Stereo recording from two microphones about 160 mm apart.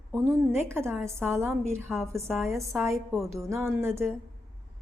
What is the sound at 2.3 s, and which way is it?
Speech, centre (ahead or behind).